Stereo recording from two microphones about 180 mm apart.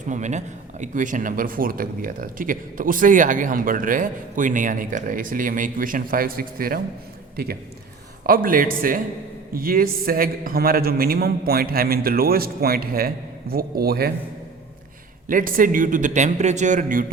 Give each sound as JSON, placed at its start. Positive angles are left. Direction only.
{"t": 0.1, "sound": "speech", "side_deg": -40}
{"t": 8.3, "sound": "a man's voice", "side_deg": -50}
{"t": 15.3, "sound": "speech", "side_deg": -50}